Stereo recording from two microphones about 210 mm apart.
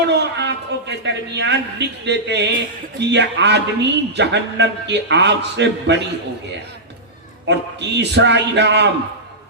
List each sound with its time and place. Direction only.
0.1 s a man's voice: 55° right (ahead or behind)
7.4 s a man's voice: 55° right (ahead or behind)